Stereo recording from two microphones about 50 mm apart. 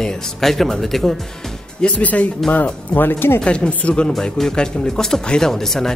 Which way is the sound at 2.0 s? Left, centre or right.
Left.